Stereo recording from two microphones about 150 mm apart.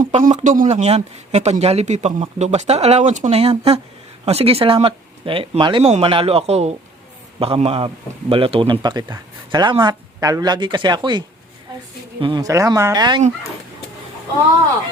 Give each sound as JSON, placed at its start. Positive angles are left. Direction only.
{"t": 0.0, "sound": "speech", "side_deg": -60}
{"t": 12.2, "sound": "speech", "side_deg": -30}